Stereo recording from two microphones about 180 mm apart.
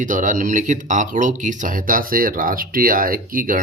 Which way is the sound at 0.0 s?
45° right (ahead or behind).